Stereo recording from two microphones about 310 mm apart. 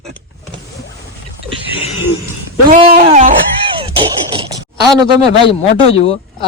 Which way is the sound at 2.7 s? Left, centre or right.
Right.